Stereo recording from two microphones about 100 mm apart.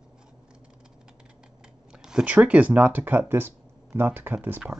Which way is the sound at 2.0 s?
10° right (ahead or behind).